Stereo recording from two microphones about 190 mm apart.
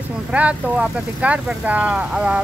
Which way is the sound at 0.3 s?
5° right (ahead or behind).